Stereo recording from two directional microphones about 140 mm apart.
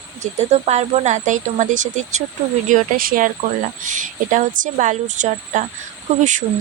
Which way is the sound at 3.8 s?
65° right (ahead or behind).